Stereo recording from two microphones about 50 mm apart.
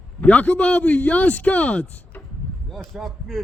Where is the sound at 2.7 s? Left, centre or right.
Centre.